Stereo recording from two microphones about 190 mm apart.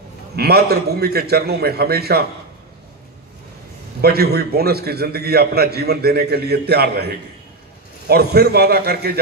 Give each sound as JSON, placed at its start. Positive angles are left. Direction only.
{"t": 0.4, "sound": "a man's voice", "side_deg": -55}
{"t": 4.0, "sound": "a man's voice", "side_deg": -55}